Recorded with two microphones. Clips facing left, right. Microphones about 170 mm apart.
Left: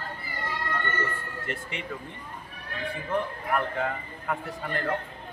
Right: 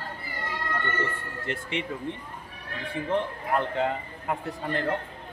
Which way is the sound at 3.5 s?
25° right (ahead or behind).